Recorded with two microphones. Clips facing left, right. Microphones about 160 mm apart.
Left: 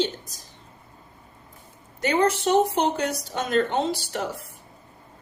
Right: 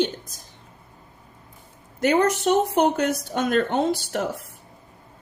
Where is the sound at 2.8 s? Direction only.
55° right (ahead or behind).